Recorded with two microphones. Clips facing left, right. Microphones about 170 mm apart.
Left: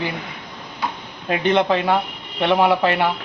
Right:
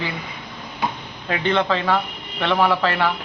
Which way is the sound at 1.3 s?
15° left (ahead or behind).